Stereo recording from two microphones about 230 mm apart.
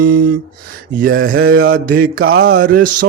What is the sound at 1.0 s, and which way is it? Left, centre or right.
Speech, right.